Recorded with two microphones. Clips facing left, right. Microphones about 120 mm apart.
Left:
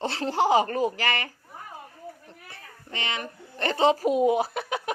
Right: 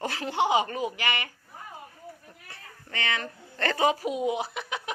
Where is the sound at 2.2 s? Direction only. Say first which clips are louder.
Left 2 dB; 20° left (ahead or behind).